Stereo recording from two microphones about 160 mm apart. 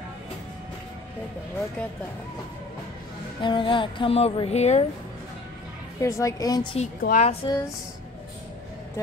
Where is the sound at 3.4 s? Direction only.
30° left (ahead or behind).